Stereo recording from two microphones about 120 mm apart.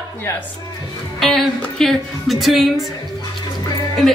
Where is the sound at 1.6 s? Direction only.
5° left (ahead or behind).